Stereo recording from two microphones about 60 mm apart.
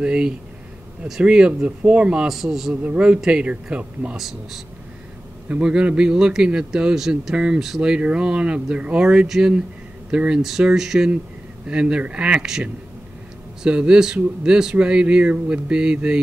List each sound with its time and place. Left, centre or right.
0.0 s a man's voice: centre
2.2 s a man's voice: centre
2.7 s a man's voice: right
4.2 s a man's voice: centre
5.5 s a man's voice: centre